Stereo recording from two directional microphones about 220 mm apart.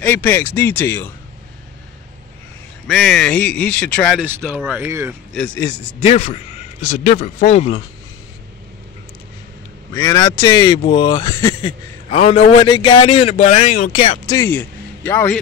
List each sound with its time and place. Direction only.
0.0 s speech: 10° left (ahead or behind)
2.9 s speech: centre (ahead or behind)
5.3 s speech: 5° left (ahead or behind)
6.0 s a man's voice: 30° left (ahead or behind)
9.9 s a man's voice: 15° left (ahead or behind)
12.1 s a man's voice: 30° left (ahead or behind)
14.3 s a man's voice: 10° left (ahead or behind)